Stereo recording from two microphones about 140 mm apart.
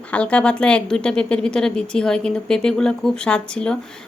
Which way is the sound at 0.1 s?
10° left (ahead or behind).